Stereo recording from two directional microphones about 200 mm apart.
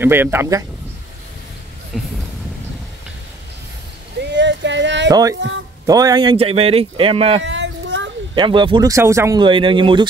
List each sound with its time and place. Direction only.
0.0 s speech: 10° right (ahead or behind)
1.9 s speech: centre (ahead or behind)
4.2 s a sound: 60° right (ahead or behind)
5.9 s speech: 20° right (ahead or behind)
7.4 s a sound: 65° right (ahead or behind)
8.4 s speech: 25° right (ahead or behind)